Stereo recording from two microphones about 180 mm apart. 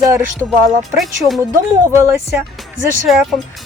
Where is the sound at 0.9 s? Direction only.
Centre (ahead or behind).